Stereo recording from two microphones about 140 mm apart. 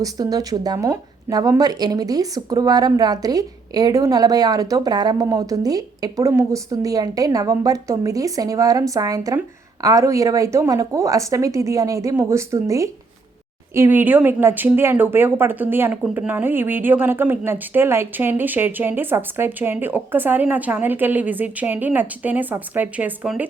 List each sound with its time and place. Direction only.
0.0 s a woman's voice: 25° right (ahead or behind); by 23.5 s 10° right (ahead or behind)